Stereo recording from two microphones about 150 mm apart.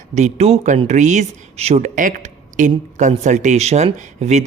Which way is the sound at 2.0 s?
60° right (ahead or behind).